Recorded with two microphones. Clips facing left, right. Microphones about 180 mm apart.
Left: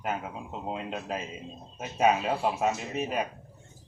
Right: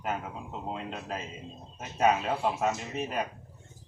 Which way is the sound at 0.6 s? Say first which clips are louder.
Left 3 dB; 10° left (ahead or behind).